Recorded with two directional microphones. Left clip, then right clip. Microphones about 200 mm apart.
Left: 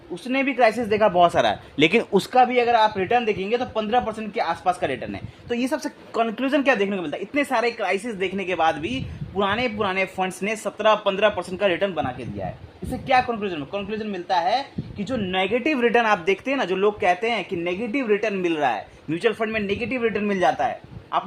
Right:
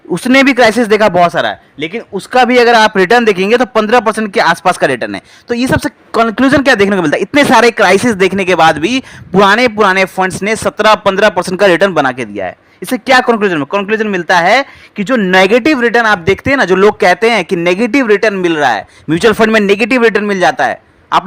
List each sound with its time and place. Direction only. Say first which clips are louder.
0.1 s speech: right 16 dB; 45° right (ahead or behind); by 1.3 s 30° right (ahead or behind)
1.3 s a man's voice: right 7 dB; 15° right (ahead or behind)
1.8 s speech: left 2 dB; 5° left (ahead or behind)
2.3 s a man's voice: right 12 dB; 40° right (ahead or behind)
6.9 s a man's voice: right 15 dB; 50° right (ahead or behind)
15.6 s speech: right 10 dB; 30° right (ahead or behind)
19.1 s a man's voice: right 15 dB; 45° right (ahead or behind)